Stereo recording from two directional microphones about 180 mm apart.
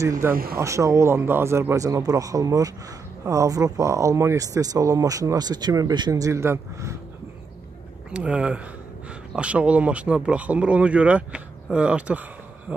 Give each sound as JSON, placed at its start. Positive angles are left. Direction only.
{"t": 0.2, "sound": "speech", "side_deg": -15}
{"t": 8.1, "sound": "speech", "side_deg": -5}